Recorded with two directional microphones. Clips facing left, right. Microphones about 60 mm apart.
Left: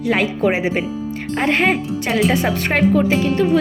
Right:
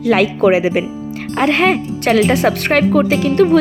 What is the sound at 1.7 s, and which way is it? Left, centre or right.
Speech, right.